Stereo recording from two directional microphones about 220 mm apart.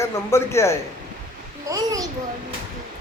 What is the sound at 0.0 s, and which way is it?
Speech, 10° left (ahead or behind).